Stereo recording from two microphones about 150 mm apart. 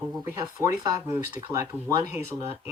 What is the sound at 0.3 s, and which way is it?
Speech, 20° right (ahead or behind).